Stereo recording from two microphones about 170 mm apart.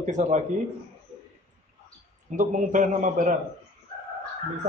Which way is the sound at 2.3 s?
50° right (ahead or behind).